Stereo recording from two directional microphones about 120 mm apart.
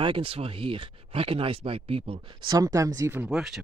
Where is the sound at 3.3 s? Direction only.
Centre (ahead or behind).